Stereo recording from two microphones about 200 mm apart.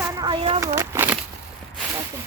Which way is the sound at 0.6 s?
15° right (ahead or behind).